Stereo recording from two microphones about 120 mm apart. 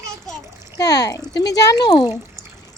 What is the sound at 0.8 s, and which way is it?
Speech, 35° left (ahead or behind).